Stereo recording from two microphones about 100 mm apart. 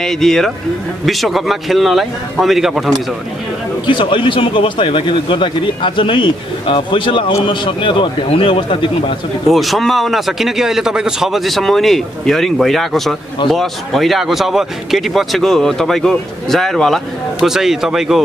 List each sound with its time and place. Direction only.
0.0 s speech: 5° left (ahead or behind)
3.8 s speech: 55° left (ahead or behind)
9.5 s speech: centre (ahead or behind)